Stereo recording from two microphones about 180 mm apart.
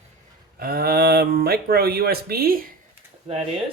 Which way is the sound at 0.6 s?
55° right (ahead or behind).